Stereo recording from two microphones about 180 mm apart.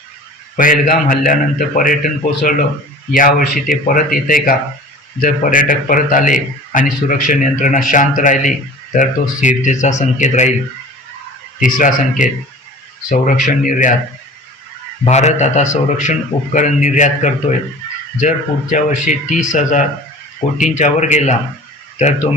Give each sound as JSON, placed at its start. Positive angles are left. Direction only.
{"t": 0.5, "sound": "a man's voice", "side_deg": 50}
{"t": 11.6, "sound": "a man's voice", "side_deg": 45}
{"t": 15.0, "sound": "a man's voice", "side_deg": 40}